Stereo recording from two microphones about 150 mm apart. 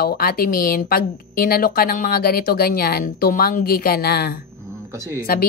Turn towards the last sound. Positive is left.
turn(degrees=-20)  # may be behind; listen again after turning